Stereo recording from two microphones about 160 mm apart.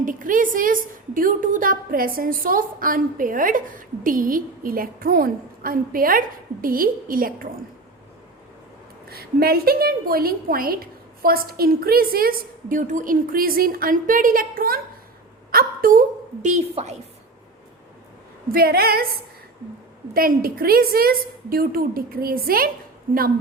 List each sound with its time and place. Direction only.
0.0 s a woman's voice: 55° right (ahead or behind)
9.0 s a woman's voice: 70° right (ahead or behind); by 16.9 s 45° right (ahead or behind)
18.5 s a woman's voice: 70° right (ahead or behind)
20.1 s a woman's voice: 65° right (ahead or behind)